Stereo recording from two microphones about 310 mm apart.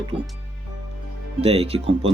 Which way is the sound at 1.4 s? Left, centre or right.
Centre.